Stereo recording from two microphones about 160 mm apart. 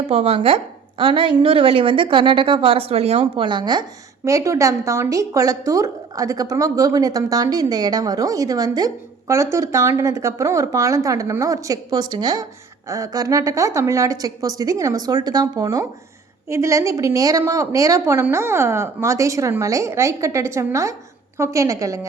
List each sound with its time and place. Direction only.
0.1 s a woman's voice: 40° right (ahead or behind); by 22.0 s 20° right (ahead or behind)